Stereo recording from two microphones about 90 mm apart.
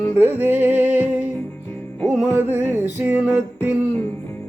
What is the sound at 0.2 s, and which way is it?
Music, 25° right (ahead or behind).